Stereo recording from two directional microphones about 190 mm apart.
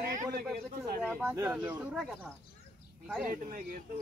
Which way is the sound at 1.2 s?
10° right (ahead or behind).